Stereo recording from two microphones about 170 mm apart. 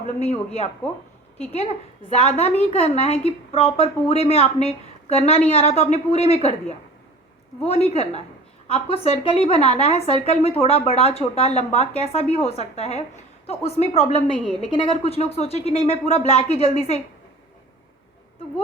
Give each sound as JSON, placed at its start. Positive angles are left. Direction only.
{"t": 0.2, "sound": "a woman's voice", "side_deg": 40}